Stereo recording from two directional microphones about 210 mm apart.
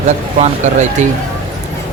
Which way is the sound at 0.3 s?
35° right (ahead or behind).